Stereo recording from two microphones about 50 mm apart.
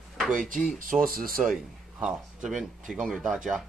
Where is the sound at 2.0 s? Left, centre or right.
Centre.